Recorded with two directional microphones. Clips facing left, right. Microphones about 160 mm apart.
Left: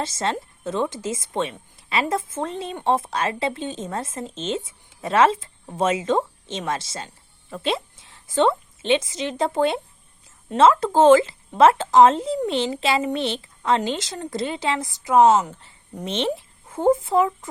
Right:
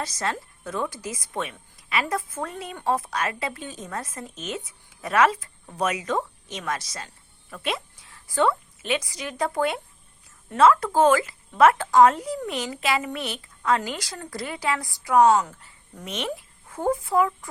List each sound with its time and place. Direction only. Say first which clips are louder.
0.0 s a woman's voice: left 4 dB; 25° left (ahead or behind)